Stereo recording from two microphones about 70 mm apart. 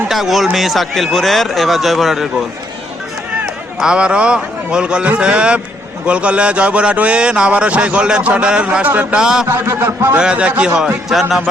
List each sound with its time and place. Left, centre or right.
0.1 s a man's voice: centre
3.8 s a man's voice: centre
9.2 s speech: centre
9.5 s a man's voice: right
10.2 s speech: centre
11.1 s a man's voice: centre